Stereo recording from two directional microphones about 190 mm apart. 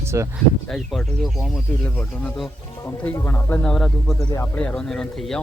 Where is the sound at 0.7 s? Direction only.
Centre (ahead or behind).